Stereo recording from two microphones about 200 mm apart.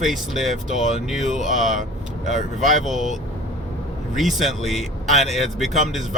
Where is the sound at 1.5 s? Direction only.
40° right (ahead or behind).